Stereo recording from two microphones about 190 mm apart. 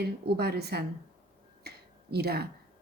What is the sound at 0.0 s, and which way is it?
A woman's voice, 60° right (ahead or behind).